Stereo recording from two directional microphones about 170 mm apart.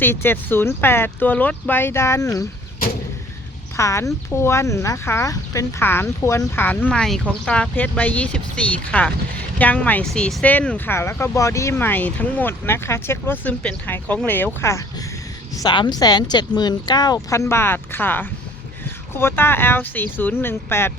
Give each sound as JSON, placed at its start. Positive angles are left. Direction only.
{"t": 0.0, "sound": "speech", "side_deg": 15}
{"t": 3.8, "sound": "speech", "side_deg": 20}
{"t": 15.5, "sound": "speech", "side_deg": 25}